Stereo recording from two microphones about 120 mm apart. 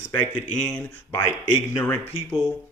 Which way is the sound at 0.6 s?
10° left (ahead or behind).